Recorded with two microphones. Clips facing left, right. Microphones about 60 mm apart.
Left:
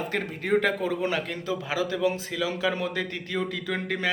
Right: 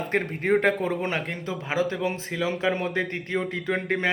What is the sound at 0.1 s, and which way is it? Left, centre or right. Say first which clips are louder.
A man's voice: right 3 dB; right.